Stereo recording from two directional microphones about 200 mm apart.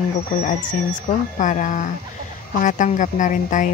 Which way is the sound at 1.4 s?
40° left (ahead or behind).